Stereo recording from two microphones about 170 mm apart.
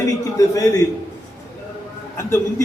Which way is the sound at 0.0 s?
20° left (ahead or behind).